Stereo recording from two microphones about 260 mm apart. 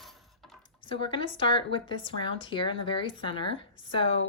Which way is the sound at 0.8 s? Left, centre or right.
Centre.